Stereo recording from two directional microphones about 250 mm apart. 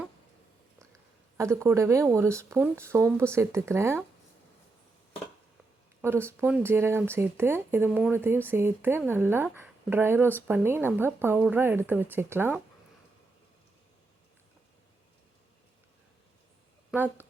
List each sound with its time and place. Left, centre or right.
1.4 s speech: centre
6.0 s speech: centre
16.9 s speech: centre